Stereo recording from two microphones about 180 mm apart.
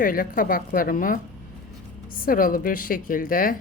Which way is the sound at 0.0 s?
50° left (ahead or behind).